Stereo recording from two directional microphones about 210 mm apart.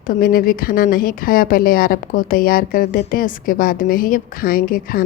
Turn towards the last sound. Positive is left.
turn(degrees=45)  # may be behind; listen again after turning